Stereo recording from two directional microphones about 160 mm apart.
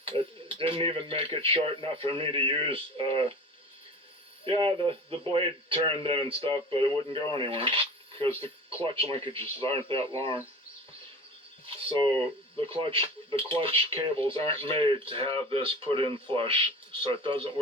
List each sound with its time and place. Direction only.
0.0 s speech: 35° right (ahead or behind)
4.4 s speech: 30° right (ahead or behind)
11.6 s speech: 30° right (ahead or behind)